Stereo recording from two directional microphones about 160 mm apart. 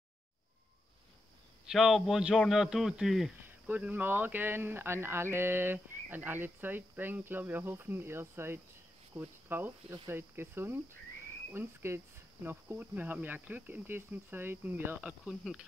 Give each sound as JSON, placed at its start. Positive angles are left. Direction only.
{"t": 1.7, "sound": "a man's voice", "side_deg": 0}